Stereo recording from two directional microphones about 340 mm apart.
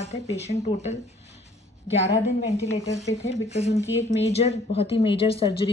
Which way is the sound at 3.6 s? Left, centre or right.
Centre.